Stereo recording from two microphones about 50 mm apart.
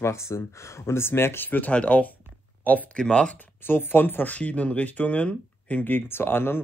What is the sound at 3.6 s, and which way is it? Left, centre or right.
Speech, left.